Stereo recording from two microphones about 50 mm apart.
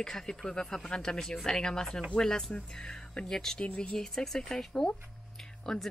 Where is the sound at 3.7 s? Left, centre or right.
Left.